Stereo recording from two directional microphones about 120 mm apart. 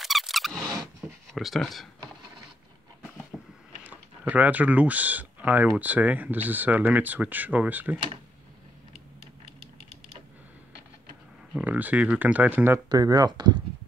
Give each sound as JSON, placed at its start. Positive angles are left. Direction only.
{"t": 0.0, "sound": "a sound", "side_deg": 0}
{"t": 1.3, "sound": "speech", "side_deg": 0}
{"t": 3.3, "sound": "a sound", "side_deg": 0}
{"t": 3.8, "sound": "speech", "side_deg": -15}
{"t": 11.5, "sound": "speech", "side_deg": -15}
{"t": 12.7, "sound": "speech", "side_deg": -30}